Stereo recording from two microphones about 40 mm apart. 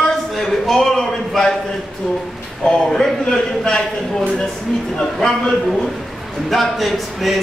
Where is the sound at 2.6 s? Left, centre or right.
Centre.